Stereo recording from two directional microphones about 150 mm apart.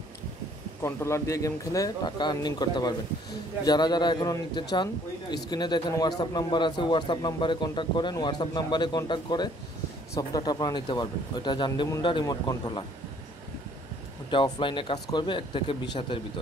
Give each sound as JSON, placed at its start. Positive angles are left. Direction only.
{"t": 0.8, "sound": "a man's voice", "side_deg": 15}
{"t": 14.3, "sound": "speech", "side_deg": 35}